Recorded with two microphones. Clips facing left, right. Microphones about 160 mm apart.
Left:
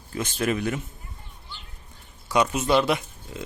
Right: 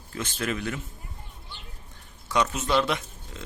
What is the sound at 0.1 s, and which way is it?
Speech, 15° left (ahead or behind).